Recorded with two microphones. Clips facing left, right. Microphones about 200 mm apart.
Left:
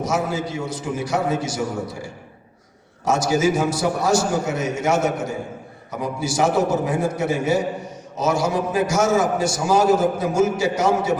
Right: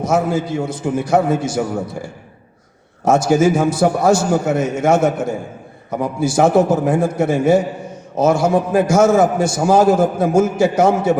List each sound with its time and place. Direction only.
0.0 s a man's voice: 55° right (ahead or behind)